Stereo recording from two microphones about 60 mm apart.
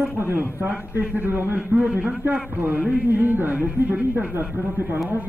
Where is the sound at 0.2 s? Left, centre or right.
Right.